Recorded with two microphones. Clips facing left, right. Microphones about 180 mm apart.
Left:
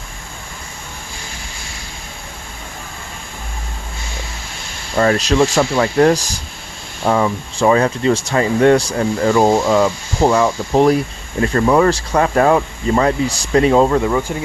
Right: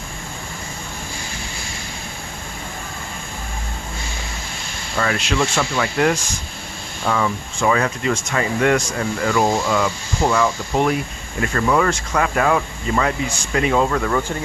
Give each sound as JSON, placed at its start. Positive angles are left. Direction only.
{"t": 4.9, "sound": "speech", "side_deg": 35}
{"t": 14.0, "sound": "speech", "side_deg": 10}